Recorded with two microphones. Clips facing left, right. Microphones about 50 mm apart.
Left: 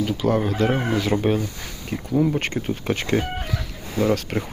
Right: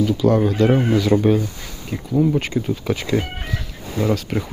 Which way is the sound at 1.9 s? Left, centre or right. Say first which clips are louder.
Right 3 dB; left.